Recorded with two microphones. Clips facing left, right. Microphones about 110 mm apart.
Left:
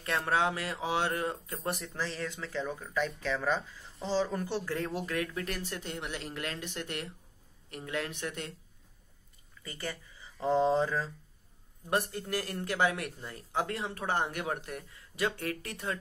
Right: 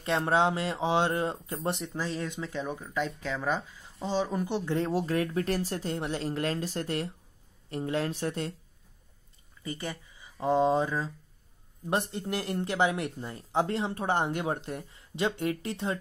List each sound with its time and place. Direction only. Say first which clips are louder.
0.0 s speech: right 4 dB; 25° right (ahead or behind)
9.6 s speech: right 4 dB; 20° right (ahead or behind)